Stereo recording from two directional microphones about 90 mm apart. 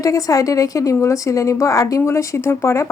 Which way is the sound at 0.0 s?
40° left (ahead or behind).